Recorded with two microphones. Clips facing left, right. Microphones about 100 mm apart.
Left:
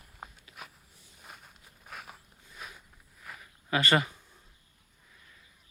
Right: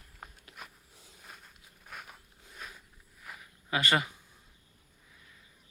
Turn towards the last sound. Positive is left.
turn(degrees=-15)  # may be behind; listen again after turning